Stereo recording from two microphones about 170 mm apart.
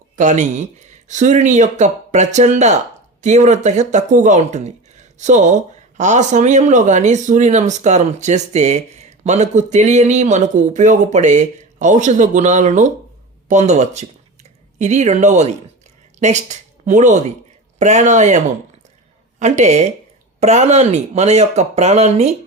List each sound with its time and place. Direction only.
0.2 s a woman's voice: 45° right (ahead or behind)